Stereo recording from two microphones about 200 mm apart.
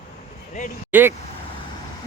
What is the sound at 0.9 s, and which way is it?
Speech, 10° right (ahead or behind).